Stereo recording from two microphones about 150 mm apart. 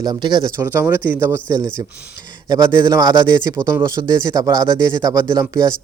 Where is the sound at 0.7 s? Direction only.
15° right (ahead or behind).